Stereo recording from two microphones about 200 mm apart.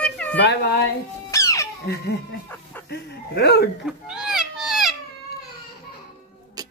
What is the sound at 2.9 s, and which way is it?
Speech, 55° left (ahead or behind).